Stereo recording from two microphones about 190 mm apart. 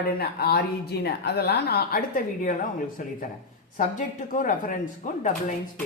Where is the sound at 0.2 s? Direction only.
55° left (ahead or behind).